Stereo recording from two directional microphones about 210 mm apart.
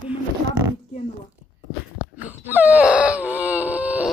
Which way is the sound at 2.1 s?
10° right (ahead or behind).